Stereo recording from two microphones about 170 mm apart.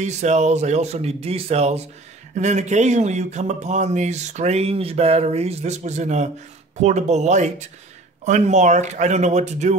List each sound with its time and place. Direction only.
0.0 s speech: 45° right (ahead or behind)